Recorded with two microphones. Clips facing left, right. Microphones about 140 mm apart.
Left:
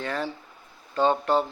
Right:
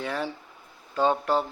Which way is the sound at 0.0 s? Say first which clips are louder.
Even; 10° right (ahead or behind).